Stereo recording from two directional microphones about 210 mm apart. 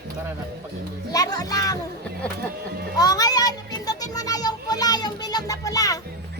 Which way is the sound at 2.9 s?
20° left (ahead or behind).